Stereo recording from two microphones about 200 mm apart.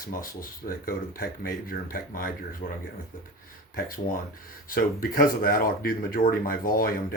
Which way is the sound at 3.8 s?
45° left (ahead or behind).